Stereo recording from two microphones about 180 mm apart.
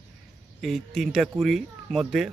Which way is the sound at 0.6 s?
Centre (ahead or behind).